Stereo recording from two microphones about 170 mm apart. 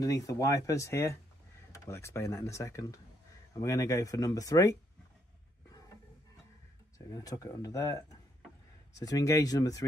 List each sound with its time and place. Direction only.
0.0 s speech: 20° left (ahead or behind)
7.1 s speech: 20° left (ahead or behind)